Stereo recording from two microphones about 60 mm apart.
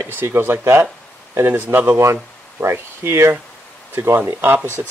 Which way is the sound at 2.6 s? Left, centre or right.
Right.